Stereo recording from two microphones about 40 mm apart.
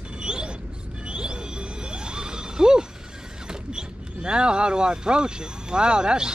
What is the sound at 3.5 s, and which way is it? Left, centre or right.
Speech, right.